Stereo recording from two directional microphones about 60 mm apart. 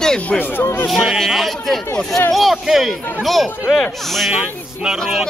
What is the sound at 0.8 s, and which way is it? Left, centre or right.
Speech, centre.